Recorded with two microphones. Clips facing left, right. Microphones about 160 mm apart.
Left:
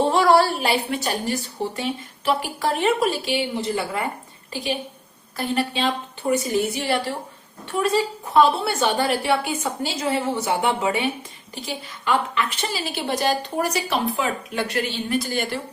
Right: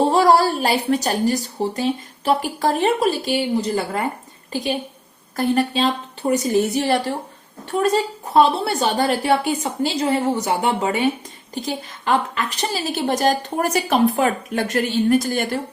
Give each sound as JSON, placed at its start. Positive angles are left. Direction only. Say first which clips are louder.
{"t": 0.1, "sound": "a woman's voice", "louder": "right 2 dB", "side_deg": -40}